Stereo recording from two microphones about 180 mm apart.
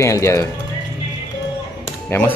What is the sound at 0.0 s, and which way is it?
Speech, 15° left (ahead or behind).